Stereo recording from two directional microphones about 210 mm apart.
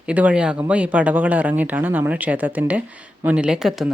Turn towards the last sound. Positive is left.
turn(degrees=0)  # may be behind; listen again after turning